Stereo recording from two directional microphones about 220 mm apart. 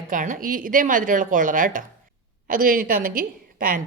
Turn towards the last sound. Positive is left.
turn(degrees=-40)  # may be behind; listen again after turning